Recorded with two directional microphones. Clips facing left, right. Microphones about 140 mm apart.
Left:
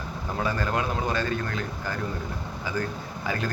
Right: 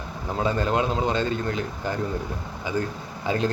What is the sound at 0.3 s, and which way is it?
A man's voice, 20° right (ahead or behind).